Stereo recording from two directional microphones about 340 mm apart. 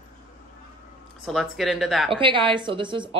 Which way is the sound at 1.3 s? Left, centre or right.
Centre.